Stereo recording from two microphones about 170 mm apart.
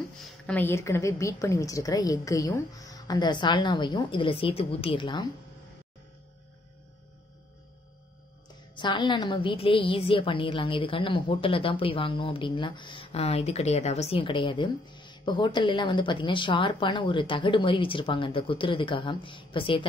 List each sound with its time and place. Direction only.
0.5 s a woman's voice: 10° left (ahead or behind); by 5.3 s 30° left (ahead or behind)
8.7 s a woman's voice: 25° left (ahead or behind)